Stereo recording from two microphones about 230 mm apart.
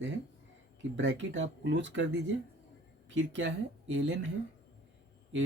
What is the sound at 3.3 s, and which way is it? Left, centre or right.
Speech, right.